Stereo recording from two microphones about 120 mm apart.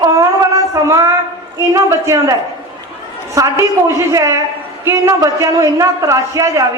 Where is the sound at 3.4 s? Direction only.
25° right (ahead or behind).